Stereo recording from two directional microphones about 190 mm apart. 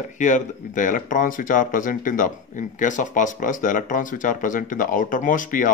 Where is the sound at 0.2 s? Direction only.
40° left (ahead or behind).